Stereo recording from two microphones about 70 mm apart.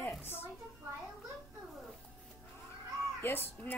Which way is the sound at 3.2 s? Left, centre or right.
Left.